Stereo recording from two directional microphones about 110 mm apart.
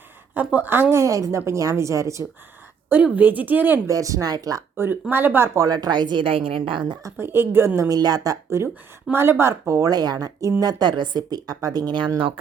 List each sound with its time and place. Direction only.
0.3 s a woman's voice: 15° right (ahead or behind)
2.9 s a woman's voice: 15° right (ahead or behind)
3.8 s speech: 30° right (ahead or behind)
4.8 s a woman's voice: 20° right (ahead or behind)
5.5 s a woman's voice: 35° right (ahead or behind)
7.0 s a woman's voice: 20° right (ahead or behind); by 12.3 s 45° right (ahead or behind)